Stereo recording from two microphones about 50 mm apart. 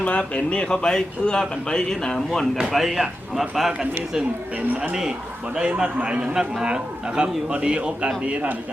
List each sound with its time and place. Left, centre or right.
0.0 s a man's voice: left
2.7 s a man's voice: centre; by 8.5 s right